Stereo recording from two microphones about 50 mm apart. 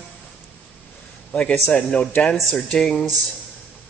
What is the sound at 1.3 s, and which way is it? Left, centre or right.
A man's voice, centre.